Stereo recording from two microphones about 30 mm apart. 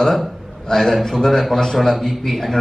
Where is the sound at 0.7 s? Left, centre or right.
Centre.